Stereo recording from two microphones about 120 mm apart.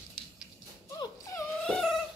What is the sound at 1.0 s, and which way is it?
Dog, 25° left (ahead or behind).